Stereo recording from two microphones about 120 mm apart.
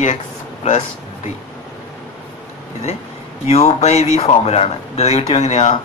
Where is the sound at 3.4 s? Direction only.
65° left (ahead or behind).